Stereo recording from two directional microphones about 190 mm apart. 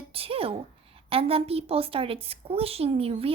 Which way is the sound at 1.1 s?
30° right (ahead or behind).